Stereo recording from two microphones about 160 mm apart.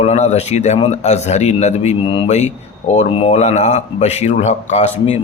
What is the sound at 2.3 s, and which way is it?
Speech, 45° left (ahead or behind).